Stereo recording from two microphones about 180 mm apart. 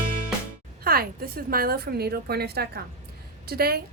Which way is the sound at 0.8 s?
55° right (ahead or behind).